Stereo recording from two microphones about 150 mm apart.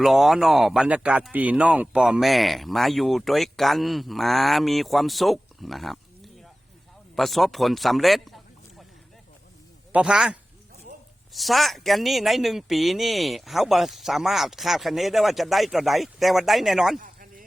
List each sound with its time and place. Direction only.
0.0 s speech: centre (ahead or behind)
9.9 s speech: 5° right (ahead or behind)
11.3 s speech: centre (ahead or behind)
17.0 s a sound: 65° right (ahead or behind)